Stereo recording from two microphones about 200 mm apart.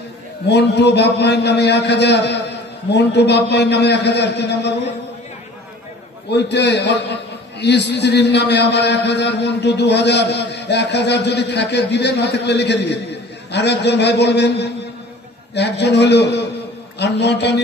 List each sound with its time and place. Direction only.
0.5 s a man's voice: 55° left (ahead or behind)
6.3 s a man's voice: 60° left (ahead or behind)